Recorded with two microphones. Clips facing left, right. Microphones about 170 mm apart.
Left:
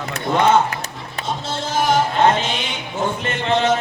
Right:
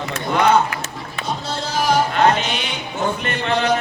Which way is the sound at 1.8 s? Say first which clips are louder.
Even; 25° left (ahead or behind).